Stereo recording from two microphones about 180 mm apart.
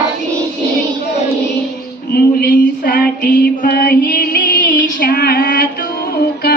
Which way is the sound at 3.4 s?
50° left (ahead or behind).